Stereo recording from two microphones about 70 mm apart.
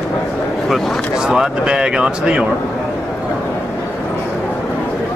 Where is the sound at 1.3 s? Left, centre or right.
Centre.